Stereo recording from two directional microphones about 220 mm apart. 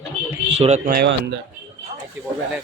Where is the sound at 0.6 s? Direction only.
30° right (ahead or behind).